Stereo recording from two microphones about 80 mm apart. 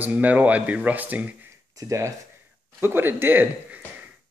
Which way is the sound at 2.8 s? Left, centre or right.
Right.